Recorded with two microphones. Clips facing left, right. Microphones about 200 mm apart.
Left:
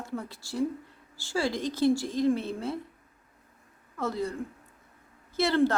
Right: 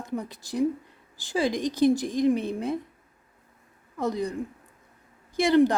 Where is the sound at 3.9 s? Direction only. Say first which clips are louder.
Right 3 dB; 15° right (ahead or behind).